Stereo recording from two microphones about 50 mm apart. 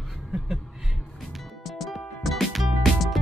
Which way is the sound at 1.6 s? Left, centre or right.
Centre.